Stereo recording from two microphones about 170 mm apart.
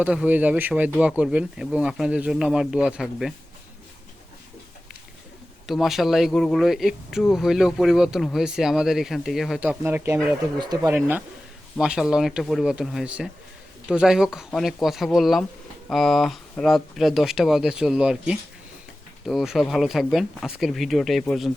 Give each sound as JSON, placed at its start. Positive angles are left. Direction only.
{"t": 0.0, "sound": "speech", "side_deg": -5}
{"t": 5.6, "sound": "speech", "side_deg": 0}